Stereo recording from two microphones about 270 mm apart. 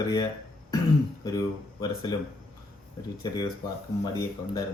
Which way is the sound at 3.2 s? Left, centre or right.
Centre.